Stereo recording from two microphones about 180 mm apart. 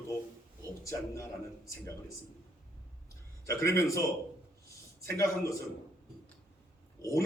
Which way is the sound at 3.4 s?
15° left (ahead or behind).